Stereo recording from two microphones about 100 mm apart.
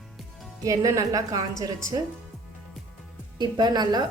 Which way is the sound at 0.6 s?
35° right (ahead or behind).